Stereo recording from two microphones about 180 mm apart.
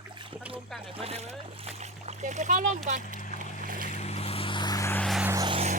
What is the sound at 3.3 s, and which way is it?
Boat, 50° right (ahead or behind).